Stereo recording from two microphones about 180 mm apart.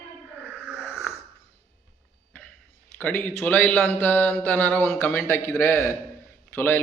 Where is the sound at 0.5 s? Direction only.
5° right (ahead or behind).